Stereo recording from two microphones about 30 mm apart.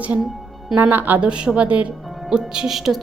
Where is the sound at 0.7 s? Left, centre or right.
Centre.